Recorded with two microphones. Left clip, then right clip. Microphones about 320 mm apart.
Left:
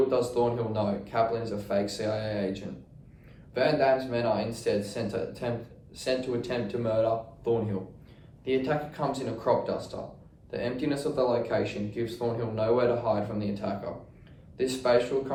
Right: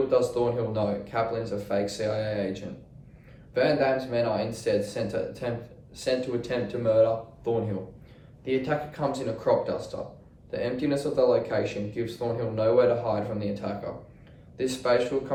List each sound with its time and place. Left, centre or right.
0.1 s speech: centre